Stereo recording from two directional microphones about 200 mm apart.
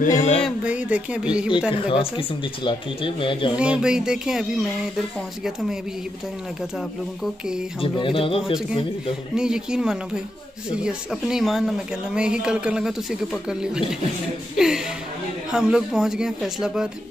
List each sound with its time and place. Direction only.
0.0 s a sound: 40° left (ahead or behind)
0.4 s speech: 5° right (ahead or behind)
1.7 s speech: 25° left (ahead or behind)
3.5 s speech: 5° right (ahead or behind)
7.8 s speech: 25° left (ahead or behind)
9.3 s speech: 5° right (ahead or behind)
15.5 s speech: 5° right (ahead or behind)